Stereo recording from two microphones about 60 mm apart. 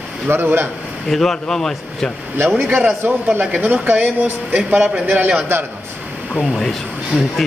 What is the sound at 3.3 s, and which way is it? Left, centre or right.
Speech, right.